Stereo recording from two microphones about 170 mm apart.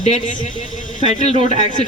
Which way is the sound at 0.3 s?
50° left (ahead or behind).